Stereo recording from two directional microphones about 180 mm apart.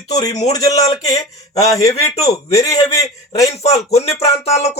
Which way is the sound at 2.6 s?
20° left (ahead or behind).